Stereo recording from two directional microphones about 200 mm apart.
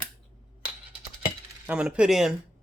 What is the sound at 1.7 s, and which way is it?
Speech, 5° right (ahead or behind).